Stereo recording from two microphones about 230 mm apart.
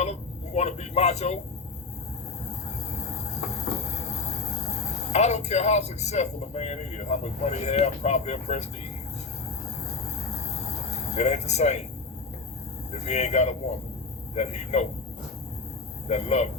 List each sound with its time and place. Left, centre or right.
0.0 s a man's voice: left
2.5 s train: left
9.9 s a sound: left
12.9 s speech: left
16.0 s speech: left